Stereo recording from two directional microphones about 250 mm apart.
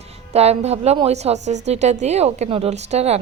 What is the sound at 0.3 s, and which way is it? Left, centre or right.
A woman's voice, right.